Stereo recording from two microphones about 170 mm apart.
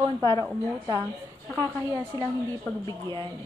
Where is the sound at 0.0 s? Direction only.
25° right (ahead or behind).